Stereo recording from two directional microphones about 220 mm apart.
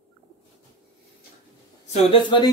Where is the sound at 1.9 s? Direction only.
20° left (ahead or behind).